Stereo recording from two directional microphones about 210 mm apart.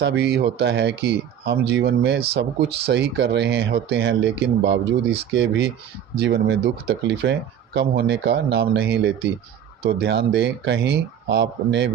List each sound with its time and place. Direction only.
0.0 s speech: 55° right (ahead or behind)